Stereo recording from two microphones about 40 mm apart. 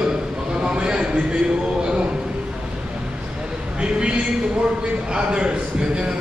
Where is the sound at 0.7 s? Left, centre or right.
Right.